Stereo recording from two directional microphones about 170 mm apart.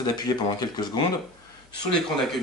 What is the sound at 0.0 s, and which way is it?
Speech, 25° left (ahead or behind).